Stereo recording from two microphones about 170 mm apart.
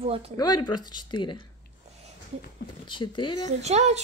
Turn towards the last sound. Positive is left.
turn(degrees=-40)  # may be behind; listen again after turning